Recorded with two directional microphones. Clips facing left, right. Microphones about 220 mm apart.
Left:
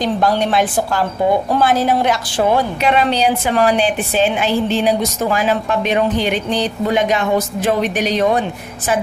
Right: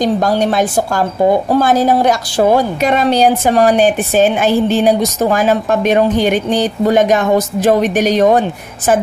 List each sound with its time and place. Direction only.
0.0 s a woman's voice: 40° right (ahead or behind)